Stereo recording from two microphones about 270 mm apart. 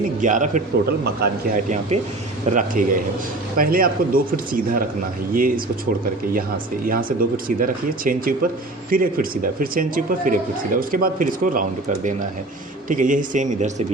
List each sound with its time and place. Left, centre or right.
0.2 s speech: right
6.8 s speech: right
12.9 s speech: right